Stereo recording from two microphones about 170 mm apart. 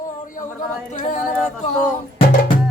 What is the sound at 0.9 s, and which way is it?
A capella, 45° left (ahead or behind).